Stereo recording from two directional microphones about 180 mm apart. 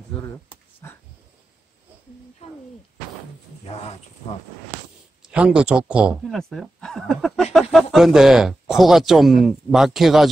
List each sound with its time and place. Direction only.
0.8 s dog: 10° left (ahead or behind)
3.6 s speech: 35° left (ahead or behind)
5.2 s speech: 5° right (ahead or behind)